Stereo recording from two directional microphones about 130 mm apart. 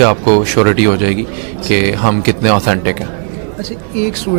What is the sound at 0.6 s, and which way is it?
Speech, 10° right (ahead or behind).